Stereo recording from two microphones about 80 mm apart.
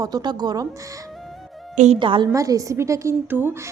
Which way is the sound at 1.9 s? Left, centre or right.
Right.